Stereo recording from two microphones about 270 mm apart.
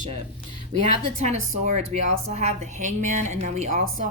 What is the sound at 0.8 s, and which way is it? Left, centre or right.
Speech, right.